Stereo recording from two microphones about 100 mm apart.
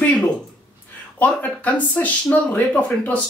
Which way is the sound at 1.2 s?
15° left (ahead or behind).